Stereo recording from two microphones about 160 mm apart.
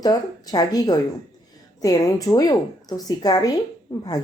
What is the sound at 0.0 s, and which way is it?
Speech, 25° left (ahead or behind).